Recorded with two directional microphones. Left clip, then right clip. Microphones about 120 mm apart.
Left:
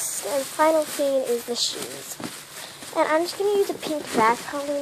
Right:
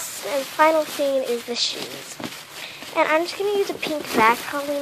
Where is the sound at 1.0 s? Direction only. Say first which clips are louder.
Right 1 dB; centre (ahead or behind).